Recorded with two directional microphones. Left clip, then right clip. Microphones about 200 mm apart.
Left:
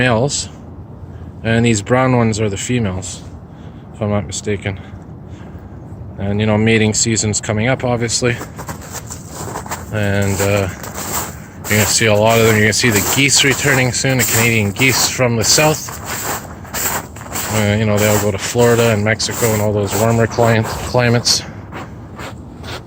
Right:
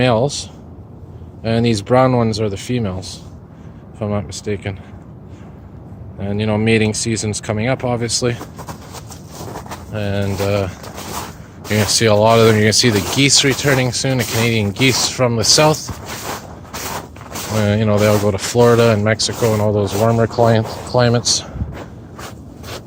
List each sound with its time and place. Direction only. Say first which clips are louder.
0.0 s speech: even; 5° right (ahead or behind)
1.4 s speech: left 2 dB; 5° right (ahead or behind)
6.1 s speech: left 3 dB; 5° right (ahead or behind)
9.4 s a sound: left 5 dB; 10° right (ahead or behind)
11.9 s speech: right 2 dB; 20° right (ahead or behind)
12.9 s speech: left 2 dB; centre (ahead or behind)
13.1 s speech: even; 15° right (ahead or behind)
14.4 s speech: even; 20° right (ahead or behind)
16.0 s a sound: left 6 dB; 5° right (ahead or behind)
17.6 s speech: even; 20° right (ahead or behind)
19.9 s speech: left 1 dB; 10° right (ahead or behind)
22.2 s a sound: left 3 dB; 50° right (ahead or behind)